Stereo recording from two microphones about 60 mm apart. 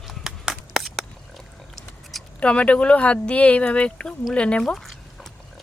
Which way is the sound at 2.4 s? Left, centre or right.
Centre.